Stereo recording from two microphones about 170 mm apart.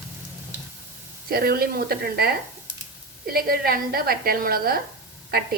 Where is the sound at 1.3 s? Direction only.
65° right (ahead or behind).